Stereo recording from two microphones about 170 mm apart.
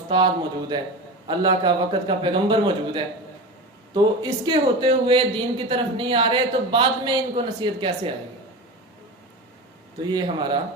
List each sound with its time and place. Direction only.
0.7 s a man's voice: 25° right (ahead or behind)
10.0 s a man's voice: 25° right (ahead or behind)